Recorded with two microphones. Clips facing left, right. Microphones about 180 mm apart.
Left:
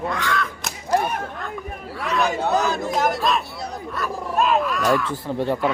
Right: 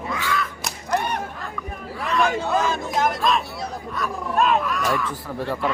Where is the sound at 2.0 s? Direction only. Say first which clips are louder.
Even; centre (ahead or behind).